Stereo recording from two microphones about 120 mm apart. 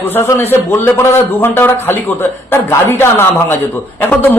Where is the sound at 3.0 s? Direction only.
20° left (ahead or behind).